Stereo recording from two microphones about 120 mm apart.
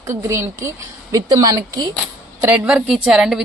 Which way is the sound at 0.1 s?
25° right (ahead or behind).